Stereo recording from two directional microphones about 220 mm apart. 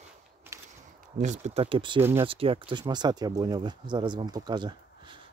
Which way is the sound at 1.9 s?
10° right (ahead or behind).